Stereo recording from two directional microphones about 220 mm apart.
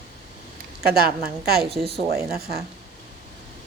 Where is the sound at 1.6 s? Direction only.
Centre (ahead or behind).